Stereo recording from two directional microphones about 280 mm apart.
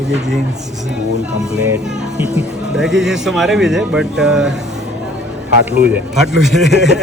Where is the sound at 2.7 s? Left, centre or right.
Centre.